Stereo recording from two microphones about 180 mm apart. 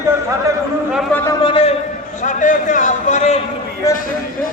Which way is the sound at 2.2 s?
45° left (ahead or behind).